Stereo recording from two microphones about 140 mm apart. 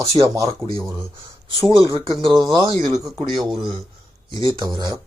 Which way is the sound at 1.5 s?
40° right (ahead or behind).